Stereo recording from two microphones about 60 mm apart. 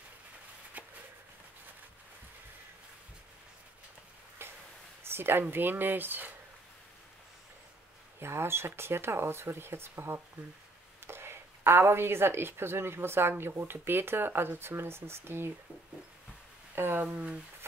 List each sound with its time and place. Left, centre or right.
0.8 s a sound: right
4.4 s a sound: right
5.5 s a woman's voice: right
8.2 s a woman's voice: right
16.7 s speech: right
17.0 s speech: right